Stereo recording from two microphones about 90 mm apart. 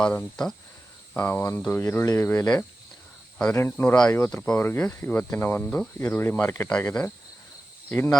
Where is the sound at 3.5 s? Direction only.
25° left (ahead or behind).